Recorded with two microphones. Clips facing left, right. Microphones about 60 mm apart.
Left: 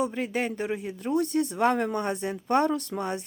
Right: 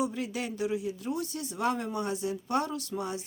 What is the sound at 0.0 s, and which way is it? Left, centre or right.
Speech, left.